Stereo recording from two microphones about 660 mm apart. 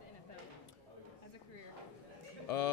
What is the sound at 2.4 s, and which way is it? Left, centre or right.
Speech, left.